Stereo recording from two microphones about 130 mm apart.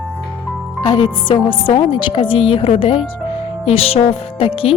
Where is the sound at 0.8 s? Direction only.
35° left (ahead or behind).